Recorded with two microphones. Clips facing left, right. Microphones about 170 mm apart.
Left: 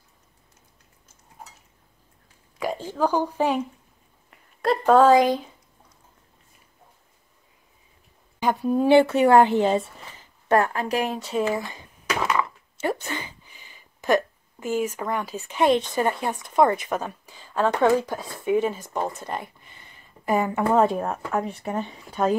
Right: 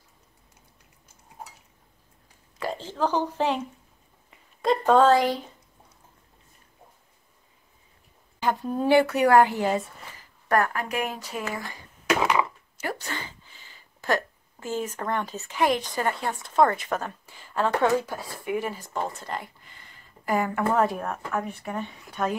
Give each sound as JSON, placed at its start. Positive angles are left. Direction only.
{"t": 2.6, "sound": "a woman's voice", "side_deg": 15}
{"t": 4.3, "sound": "a woman's voice", "side_deg": 0}
{"t": 8.4, "sound": "speech", "side_deg": 15}
{"t": 8.8, "sound": "speech", "side_deg": 25}